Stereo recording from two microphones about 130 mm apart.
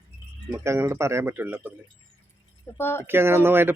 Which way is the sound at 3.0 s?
20° right (ahead or behind).